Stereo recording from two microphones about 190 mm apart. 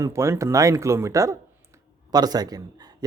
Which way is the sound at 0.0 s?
15° right (ahead or behind).